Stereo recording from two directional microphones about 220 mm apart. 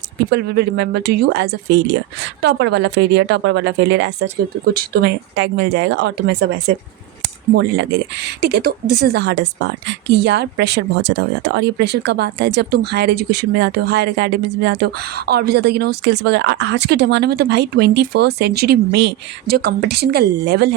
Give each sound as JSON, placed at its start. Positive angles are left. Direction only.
{"t": 0.3, "sound": "a woman's voice", "side_deg": -50}